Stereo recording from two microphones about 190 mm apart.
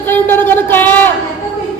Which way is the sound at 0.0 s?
10° left (ahead or behind).